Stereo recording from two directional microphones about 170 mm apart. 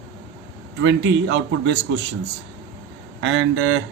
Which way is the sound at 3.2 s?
90° right.